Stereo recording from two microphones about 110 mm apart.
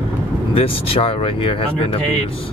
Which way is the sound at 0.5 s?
60° left (ahead or behind).